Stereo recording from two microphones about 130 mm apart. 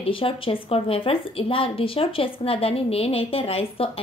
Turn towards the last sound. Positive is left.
turn(degrees=45)  # may be behind; listen again after turning